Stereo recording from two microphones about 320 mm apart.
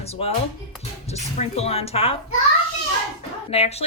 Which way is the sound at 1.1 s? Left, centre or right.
Centre.